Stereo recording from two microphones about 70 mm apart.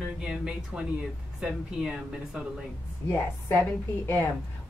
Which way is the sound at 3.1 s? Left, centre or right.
Left.